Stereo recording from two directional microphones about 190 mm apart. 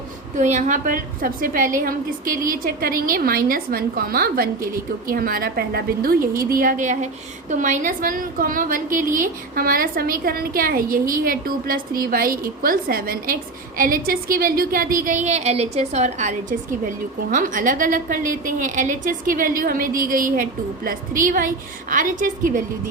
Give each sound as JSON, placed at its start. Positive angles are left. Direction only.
{"t": 0.3, "sound": "a woman's voice", "side_deg": -40}